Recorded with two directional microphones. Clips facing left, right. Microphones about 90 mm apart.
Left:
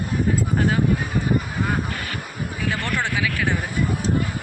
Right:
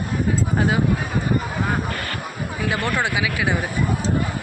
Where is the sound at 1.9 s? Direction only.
5° left (ahead or behind).